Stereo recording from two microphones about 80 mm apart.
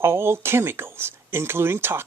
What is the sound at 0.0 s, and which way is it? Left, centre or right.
Speech, right.